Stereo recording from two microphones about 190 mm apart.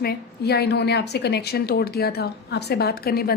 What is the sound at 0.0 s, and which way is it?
A woman's voice, 55° left (ahead or behind).